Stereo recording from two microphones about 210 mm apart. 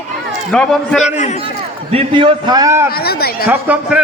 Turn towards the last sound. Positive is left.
turn(degrees=-5)  # may be behind; listen again after turning